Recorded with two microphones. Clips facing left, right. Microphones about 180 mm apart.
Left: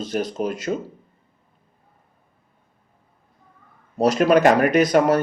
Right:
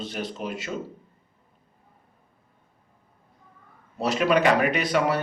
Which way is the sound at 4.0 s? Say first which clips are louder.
Left 6 dB; 40° left (ahead or behind).